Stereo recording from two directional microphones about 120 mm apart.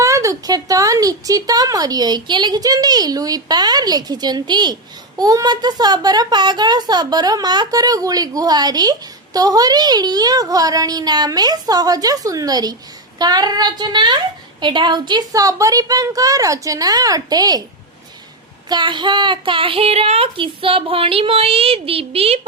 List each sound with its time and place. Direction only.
0.0 s speech: 25° right (ahead or behind)
18.7 s speech: 40° right (ahead or behind)